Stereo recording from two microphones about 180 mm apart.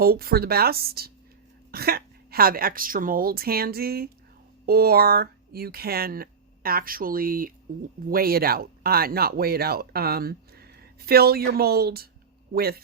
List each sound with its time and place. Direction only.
0.0 s speech: 55° right (ahead or behind)